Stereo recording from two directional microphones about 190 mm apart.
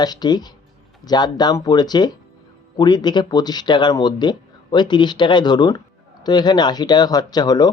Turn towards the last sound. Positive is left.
turn(degrees=20)  # may be behind; listen again after turning